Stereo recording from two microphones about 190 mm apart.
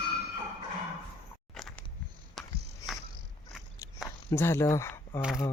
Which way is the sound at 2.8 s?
20° left (ahead or behind).